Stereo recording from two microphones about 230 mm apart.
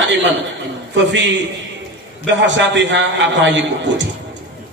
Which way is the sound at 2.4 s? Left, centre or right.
Right.